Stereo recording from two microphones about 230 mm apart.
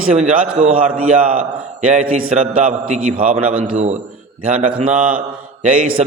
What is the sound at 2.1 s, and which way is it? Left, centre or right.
A man's voice, right.